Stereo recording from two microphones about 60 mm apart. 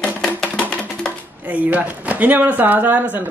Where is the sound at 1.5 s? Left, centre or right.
Right.